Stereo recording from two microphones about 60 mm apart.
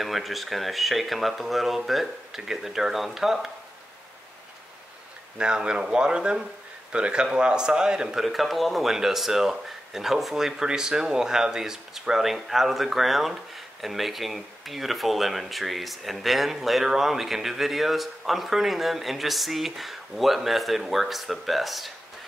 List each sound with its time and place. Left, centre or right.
0.0 s a man's voice: centre
5.4 s a man's voice: centre